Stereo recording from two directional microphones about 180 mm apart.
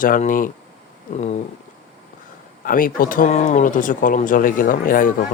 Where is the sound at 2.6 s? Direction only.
50° left (ahead or behind).